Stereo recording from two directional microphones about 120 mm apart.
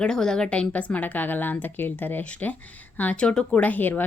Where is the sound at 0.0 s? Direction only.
5° left (ahead or behind).